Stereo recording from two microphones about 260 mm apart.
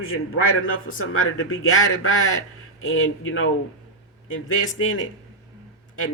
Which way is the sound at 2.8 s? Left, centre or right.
Left.